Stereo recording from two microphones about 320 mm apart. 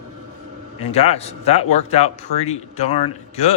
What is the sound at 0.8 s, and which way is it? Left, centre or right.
Speech, centre.